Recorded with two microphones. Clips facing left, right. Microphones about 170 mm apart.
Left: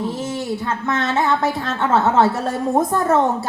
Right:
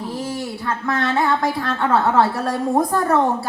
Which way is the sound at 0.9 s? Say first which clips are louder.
Even; 25° left (ahead or behind).